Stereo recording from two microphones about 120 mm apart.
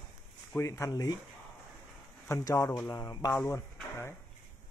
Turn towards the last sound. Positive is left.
turn(degrees=20)  # may be behind; listen again after turning